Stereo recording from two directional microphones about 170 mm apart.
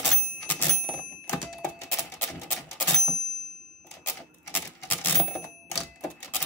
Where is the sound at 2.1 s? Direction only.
10° left (ahead or behind).